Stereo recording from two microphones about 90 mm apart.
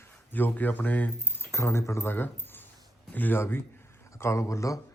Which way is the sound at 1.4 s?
30° left (ahead or behind).